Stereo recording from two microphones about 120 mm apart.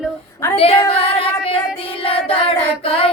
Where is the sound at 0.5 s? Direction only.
55° left (ahead or behind).